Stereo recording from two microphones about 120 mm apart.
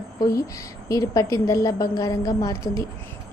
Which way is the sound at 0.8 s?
30° left (ahead or behind).